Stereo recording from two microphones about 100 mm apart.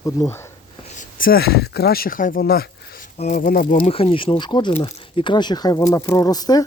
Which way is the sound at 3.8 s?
75° left (ahead or behind).